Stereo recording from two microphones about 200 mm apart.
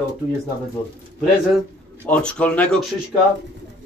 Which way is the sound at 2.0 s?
5° left (ahead or behind).